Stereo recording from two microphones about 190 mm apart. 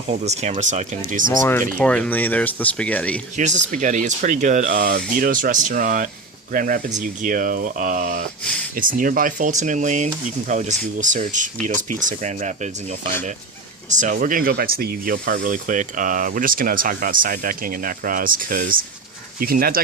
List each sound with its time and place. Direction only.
0.1 s speech: 35° right (ahead or behind)
1.8 s speech: 5° left (ahead or behind)
3.3 s speech: 40° right (ahead or behind)
13.9 s speech: 40° right (ahead or behind)